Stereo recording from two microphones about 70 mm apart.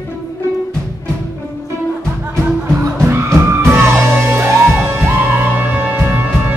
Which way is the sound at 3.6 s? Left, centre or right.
Right.